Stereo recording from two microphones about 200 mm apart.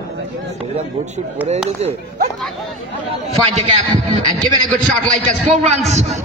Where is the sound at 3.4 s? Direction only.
30° right (ahead or behind).